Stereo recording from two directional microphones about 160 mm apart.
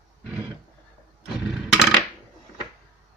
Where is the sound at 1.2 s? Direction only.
Centre (ahead or behind).